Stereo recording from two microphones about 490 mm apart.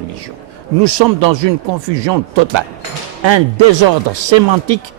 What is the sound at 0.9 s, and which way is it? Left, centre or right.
A man's voice, right.